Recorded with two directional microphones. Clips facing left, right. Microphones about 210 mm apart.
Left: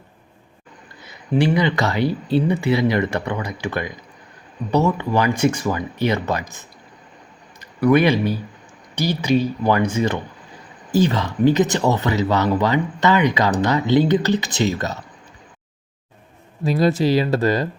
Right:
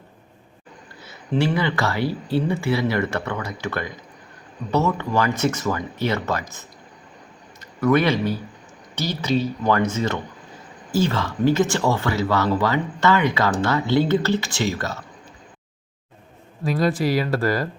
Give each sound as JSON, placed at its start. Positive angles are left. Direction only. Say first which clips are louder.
{"t": 1.0, "sound": "speech", "louder": "left 3 dB", "side_deg": 15}
{"t": 7.6, "sound": "speech", "louder": "left 3 dB", "side_deg": 15}
{"t": 16.8, "sound": "speech", "louder": "left 4 dB", "side_deg": 25}